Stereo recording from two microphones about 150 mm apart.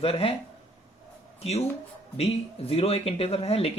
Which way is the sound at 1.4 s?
45° left (ahead or behind).